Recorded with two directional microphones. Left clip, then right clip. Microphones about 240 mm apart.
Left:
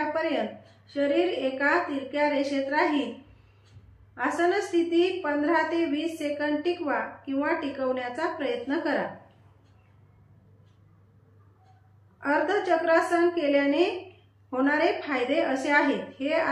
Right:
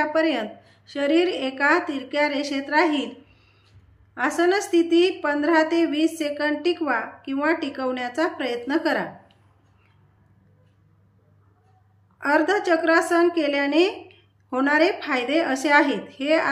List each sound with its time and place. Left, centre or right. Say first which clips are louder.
0.1 s a woman's voice: right 5 dB; right
4.1 s a woman's voice: right 4 dB; right
12.2 s a woman's voice: right 5 dB; right